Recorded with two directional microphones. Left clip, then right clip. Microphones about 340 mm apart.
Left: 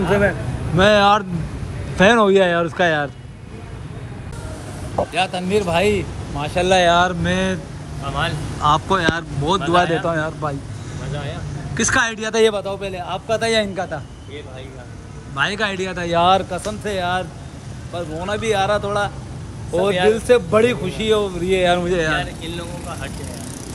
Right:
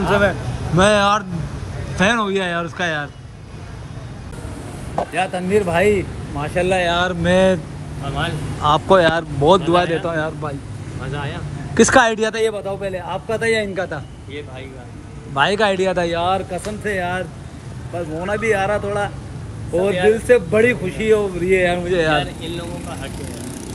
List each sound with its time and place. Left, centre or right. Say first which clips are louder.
0.7 s speech: left 1 dB; centre
5.1 s speech: right 2 dB; centre
6.7 s speech: left 5 dB; left
7.0 s speech: right 2 dB; centre
11.1 s speech: right 2 dB; centre
15.3 s speech: right 4 dB; centre
16.1 s speech: left 4 dB; left
16.5 s speech: right 1 dB; centre
21.9 s speech: right 2 dB; centre